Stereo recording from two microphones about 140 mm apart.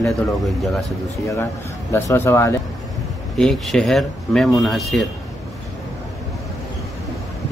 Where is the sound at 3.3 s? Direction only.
5° left (ahead or behind).